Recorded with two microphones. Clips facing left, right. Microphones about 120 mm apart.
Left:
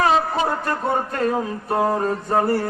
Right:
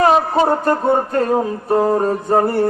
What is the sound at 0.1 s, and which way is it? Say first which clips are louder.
Music: right 5 dB; 40° right (ahead or behind).